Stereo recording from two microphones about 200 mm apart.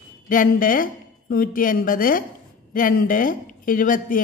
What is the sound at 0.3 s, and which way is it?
A woman's voice, 45° left (ahead or behind).